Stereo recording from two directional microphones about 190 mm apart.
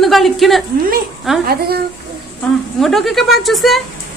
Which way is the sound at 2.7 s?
Centre (ahead or behind).